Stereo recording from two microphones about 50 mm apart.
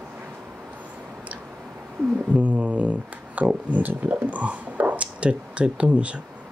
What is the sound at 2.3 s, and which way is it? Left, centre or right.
Speech, right.